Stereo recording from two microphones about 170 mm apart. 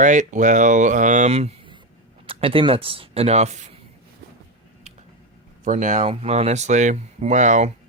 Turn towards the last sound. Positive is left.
turn(degrees=-45)  # may be behind; listen again after turning